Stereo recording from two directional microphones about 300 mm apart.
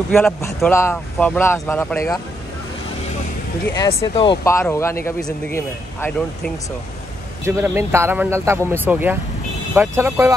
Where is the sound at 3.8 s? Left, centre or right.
Centre.